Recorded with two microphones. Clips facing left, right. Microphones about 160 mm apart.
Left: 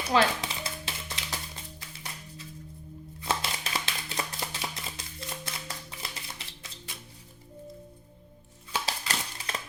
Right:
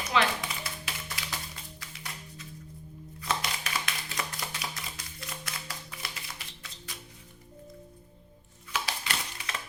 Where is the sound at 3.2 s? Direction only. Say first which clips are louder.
Left 1 dB; 30° left (ahead or behind).